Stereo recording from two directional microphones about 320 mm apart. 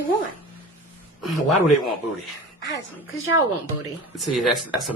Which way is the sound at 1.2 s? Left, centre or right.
Left.